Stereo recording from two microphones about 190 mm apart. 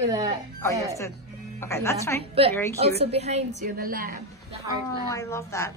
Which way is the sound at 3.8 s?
50° right (ahead or behind).